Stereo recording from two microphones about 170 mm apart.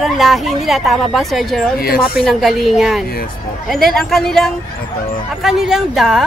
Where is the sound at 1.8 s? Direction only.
60° left (ahead or behind).